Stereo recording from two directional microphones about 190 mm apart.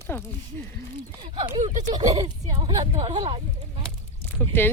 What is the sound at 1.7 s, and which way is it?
Speech, 40° right (ahead or behind).